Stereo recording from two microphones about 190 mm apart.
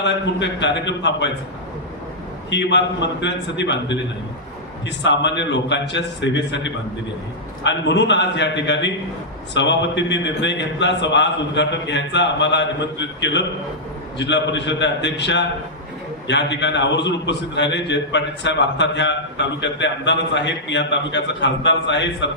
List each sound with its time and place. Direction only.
0.0 s a man's voice: 70° left (ahead or behind)
2.5 s a man's voice: 70° left (ahead or behind)